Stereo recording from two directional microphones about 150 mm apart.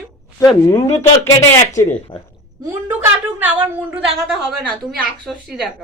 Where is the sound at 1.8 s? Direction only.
50° left (ahead or behind).